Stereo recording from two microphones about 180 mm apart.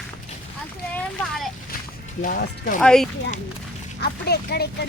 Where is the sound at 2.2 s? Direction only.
50° left (ahead or behind).